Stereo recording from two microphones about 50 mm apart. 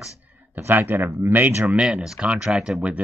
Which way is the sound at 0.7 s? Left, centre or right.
Right.